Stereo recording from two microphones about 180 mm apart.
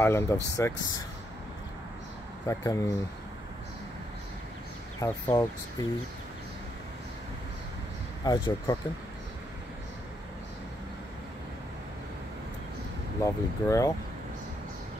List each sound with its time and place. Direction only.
0.0 s speech: 15° left (ahead or behind)
2.4 s speech: 15° left (ahead or behind)
5.0 s speech: 20° left (ahead or behind)
8.2 s speech: 20° left (ahead or behind)
13.2 s speech: 15° left (ahead or behind)